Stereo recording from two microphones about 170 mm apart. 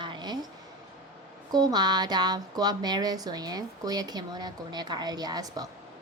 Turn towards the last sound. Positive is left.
turn(degrees=-20)  # may be behind; listen again after turning